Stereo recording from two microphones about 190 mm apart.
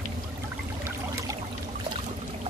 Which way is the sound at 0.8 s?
15° right (ahead or behind).